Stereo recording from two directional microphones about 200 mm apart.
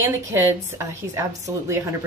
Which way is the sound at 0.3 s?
10° right (ahead or behind).